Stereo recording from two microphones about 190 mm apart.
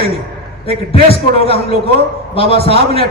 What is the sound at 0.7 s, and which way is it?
A man's voice, 30° left (ahead or behind).